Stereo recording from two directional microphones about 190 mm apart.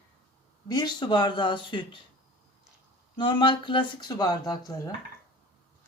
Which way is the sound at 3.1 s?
25° left (ahead or behind).